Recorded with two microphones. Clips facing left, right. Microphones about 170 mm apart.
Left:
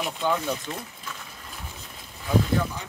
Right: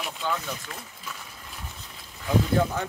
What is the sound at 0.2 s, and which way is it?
Speech, 15° left (ahead or behind).